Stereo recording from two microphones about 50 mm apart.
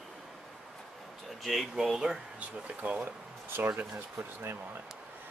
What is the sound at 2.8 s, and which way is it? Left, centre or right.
Speech, right.